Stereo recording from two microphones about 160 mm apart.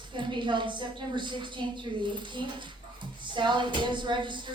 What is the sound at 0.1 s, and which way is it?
A woman's voice, 30° right (ahead or behind).